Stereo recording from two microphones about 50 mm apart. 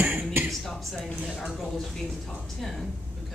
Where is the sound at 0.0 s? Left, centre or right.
Right.